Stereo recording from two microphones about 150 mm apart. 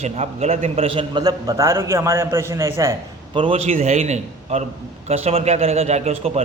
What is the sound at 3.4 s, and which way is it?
A man's voice, 40° right (ahead or behind).